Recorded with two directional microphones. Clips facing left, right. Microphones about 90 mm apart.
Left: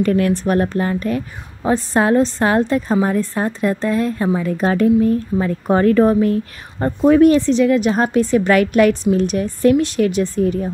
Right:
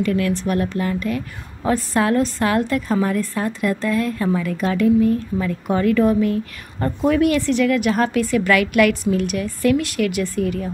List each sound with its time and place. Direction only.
0.0 s a woman's voice: 40° left (ahead or behind)